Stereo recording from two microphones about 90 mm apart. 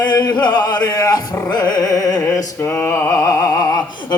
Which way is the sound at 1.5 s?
50° left (ahead or behind).